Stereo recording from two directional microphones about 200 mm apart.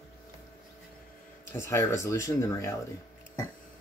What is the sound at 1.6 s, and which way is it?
Speech, 15° left (ahead or behind).